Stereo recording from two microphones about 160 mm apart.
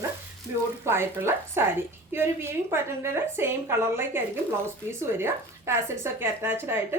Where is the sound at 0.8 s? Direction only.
15° right (ahead or behind).